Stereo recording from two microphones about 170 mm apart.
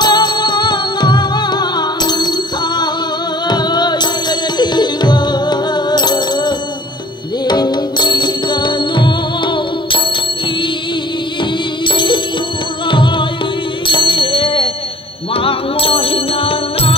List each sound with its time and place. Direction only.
0.0 s music: 25° left (ahead or behind)
11.8 s music: 30° left (ahead or behind)